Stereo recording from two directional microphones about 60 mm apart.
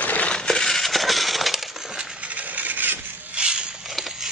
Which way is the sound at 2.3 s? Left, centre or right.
Right.